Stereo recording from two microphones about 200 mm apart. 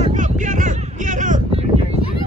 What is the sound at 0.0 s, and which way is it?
Vehicle, 40° right (ahead or behind).